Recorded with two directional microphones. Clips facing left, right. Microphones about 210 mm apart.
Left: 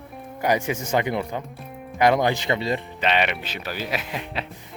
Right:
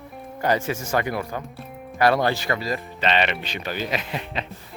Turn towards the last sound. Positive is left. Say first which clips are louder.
# right 1 dB
turn(degrees=10)  # may be behind; listen again after turning